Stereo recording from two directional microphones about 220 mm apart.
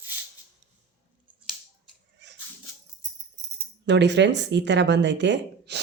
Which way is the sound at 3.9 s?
50° right (ahead or behind).